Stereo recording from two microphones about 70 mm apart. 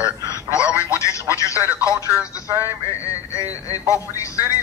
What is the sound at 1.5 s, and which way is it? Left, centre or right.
Speech, right.